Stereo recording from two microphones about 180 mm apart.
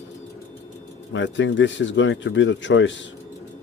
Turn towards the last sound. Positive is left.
turn(degrees=90)